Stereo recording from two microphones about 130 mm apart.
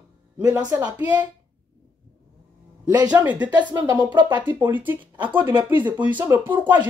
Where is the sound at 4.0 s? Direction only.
35° right (ahead or behind).